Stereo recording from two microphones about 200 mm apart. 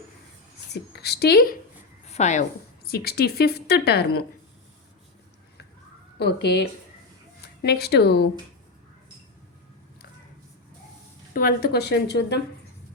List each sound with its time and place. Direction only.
0.7 s a woman's voice: 55° left (ahead or behind)
2.0 s a woman's voice: 35° left (ahead or behind)
2.8 s a woman's voice: 50° left (ahead or behind)
6.1 s a woman's voice: 55° left (ahead or behind)
11.3 s a woman's voice: 45° left (ahead or behind)